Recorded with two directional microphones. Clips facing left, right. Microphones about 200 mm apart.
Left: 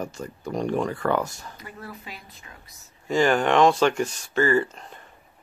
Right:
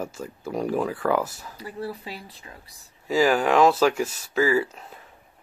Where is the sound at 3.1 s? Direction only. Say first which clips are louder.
Even; 5° right (ahead or behind).